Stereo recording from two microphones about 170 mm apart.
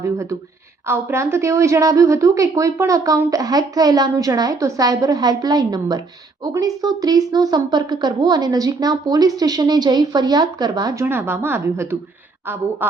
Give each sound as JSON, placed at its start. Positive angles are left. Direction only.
{"t": 0.0, "sound": "a woman's voice", "side_deg": -15}